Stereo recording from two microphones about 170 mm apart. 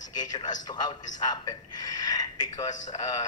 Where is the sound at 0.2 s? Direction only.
25° left (ahead or behind).